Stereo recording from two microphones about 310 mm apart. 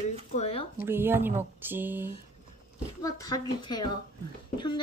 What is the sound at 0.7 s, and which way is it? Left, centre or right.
Speech, centre.